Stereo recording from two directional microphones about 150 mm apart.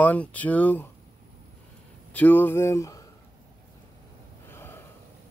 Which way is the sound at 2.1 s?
10° left (ahead or behind).